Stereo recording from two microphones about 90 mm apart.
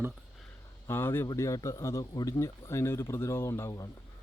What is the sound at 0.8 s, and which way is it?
Speech, 25° left (ahead or behind).